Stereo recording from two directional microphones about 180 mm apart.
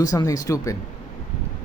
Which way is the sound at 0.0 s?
20° left (ahead or behind).